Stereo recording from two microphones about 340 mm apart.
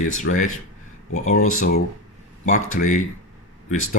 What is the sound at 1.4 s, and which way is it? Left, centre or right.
Speech, left.